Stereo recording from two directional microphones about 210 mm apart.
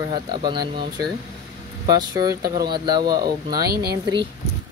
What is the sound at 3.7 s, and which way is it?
Speech, 50° right (ahead or behind).